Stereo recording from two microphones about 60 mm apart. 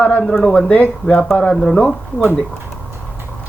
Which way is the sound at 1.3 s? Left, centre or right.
Centre.